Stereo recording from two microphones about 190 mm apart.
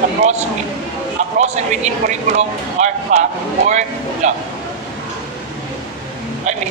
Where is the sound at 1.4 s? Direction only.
35° right (ahead or behind).